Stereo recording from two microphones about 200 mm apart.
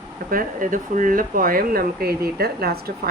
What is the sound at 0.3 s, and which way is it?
Speech, 45° right (ahead or behind).